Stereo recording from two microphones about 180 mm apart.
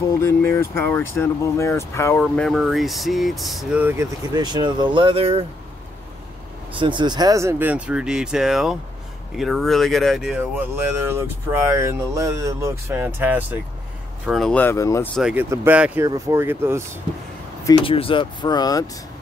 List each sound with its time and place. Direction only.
0.1 s speech: 15° left (ahead or behind); by 5.4 s 30° right (ahead or behind)
6.8 s speech: 25° right (ahead or behind); by 15.0 s 15° left (ahead or behind)
15.1 s speech: 5° right (ahead or behind)
17.6 s speech: 30° left (ahead or behind)